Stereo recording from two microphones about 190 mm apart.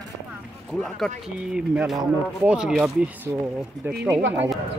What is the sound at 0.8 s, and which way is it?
Speech, centre (ahead or behind).